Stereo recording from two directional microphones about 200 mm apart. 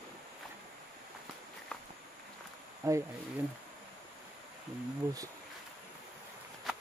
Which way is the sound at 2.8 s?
15° right (ahead or behind).